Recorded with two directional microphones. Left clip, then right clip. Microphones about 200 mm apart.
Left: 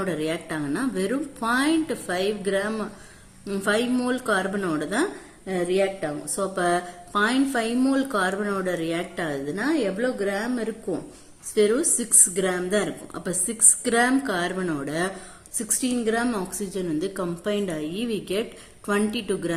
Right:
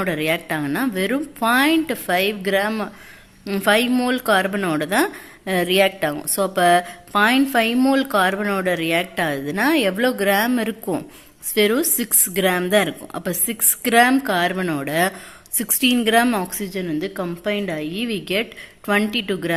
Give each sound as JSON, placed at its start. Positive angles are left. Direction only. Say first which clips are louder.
{"t": 0.0, "sound": "speech", "louder": "right 6 dB", "side_deg": -25}
{"t": 5.5, "sound": "a woman's voice", "louder": "right 6 dB", "side_deg": -40}
{"t": 16.7, "sound": "a woman's voice", "louder": "right 2 dB", "side_deg": -15}